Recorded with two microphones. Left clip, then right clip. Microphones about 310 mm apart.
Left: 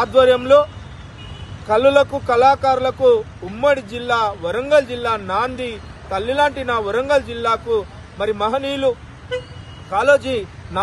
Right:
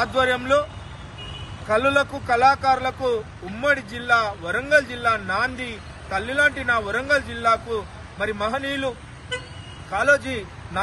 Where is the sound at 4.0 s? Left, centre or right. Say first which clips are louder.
Left 2 dB; left.